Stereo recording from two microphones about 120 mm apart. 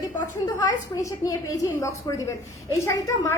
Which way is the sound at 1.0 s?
30° left (ahead or behind).